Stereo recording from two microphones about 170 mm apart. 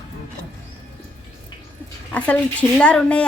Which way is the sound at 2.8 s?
5° left (ahead or behind).